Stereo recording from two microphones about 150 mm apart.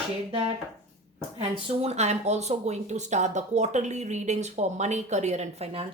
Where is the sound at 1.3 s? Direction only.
45° right (ahead or behind).